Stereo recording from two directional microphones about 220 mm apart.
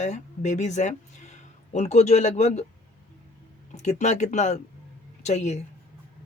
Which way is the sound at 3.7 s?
30° left (ahead or behind).